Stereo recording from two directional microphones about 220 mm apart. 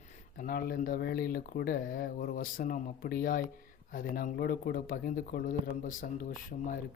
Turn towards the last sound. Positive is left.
turn(degrees=40)  # may be behind; listen again after turning